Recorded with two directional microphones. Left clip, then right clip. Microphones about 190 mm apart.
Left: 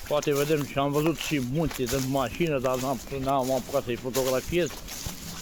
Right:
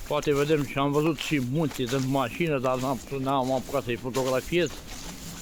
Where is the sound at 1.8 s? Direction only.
70° left (ahead or behind).